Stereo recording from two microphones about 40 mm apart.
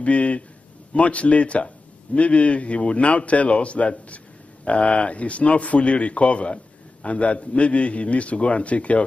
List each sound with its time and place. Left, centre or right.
0.0 s speech: left